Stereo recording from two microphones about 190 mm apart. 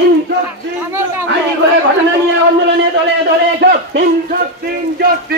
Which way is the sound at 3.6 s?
60° right (ahead or behind).